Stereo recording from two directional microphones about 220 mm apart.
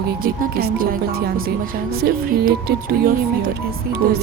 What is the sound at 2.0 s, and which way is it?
Music, 45° right (ahead or behind).